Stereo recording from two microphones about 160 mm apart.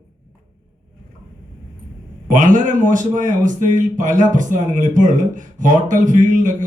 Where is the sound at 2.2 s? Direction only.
55° right (ahead or behind).